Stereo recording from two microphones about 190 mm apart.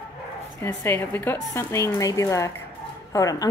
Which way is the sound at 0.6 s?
15° left (ahead or behind).